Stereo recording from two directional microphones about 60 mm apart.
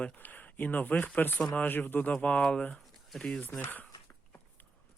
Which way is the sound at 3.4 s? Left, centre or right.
Left.